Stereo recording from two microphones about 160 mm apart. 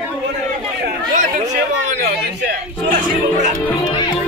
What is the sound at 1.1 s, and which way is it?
Chatter, 45° right (ahead or behind).